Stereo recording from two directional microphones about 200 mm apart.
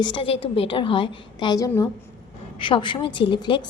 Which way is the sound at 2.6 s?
25° left (ahead or behind).